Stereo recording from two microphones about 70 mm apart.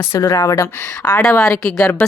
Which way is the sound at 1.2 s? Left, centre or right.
Centre.